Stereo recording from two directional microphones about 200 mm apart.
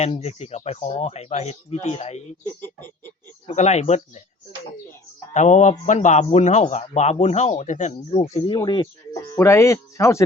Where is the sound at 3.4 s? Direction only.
35° left (ahead or behind).